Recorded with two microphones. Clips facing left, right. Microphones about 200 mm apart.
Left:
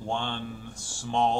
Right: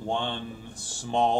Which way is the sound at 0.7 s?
35° right (ahead or behind).